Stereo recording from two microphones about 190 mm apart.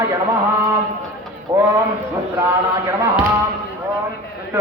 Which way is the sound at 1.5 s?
20° right (ahead or behind).